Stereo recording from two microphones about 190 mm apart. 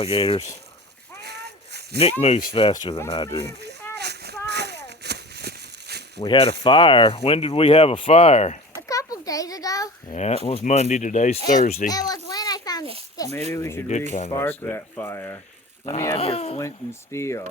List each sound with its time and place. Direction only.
0.0 s speech: 30° left (ahead or behind)
1.2 s a sound: 60° right (ahead or behind)
2.2 s speech: 35° left (ahead or behind)
3.4 s speech: 60° right (ahead or behind)
3.9 s a sound: 60° right (ahead or behind)
6.2 s speech: 25° left (ahead or behind)
8.9 s a sound: 20° left (ahead or behind)
10.1 s speech: 35° left (ahead or behind)
11.9 s a sound: 20° left (ahead or behind)
13.5 s speech: 15° left (ahead or behind)
14.1 s speech: 35° left (ahead or behind)
14.6 s speech: 10° left (ahead or behind)
16.1 s speech: 30° left (ahead or behind)
16.6 s speech: 15° left (ahead or behind)